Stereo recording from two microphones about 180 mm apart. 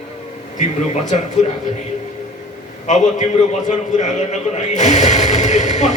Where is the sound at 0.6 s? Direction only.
45° left (ahead or behind).